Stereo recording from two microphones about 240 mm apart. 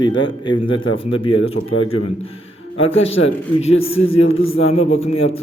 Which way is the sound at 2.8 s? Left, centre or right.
Left.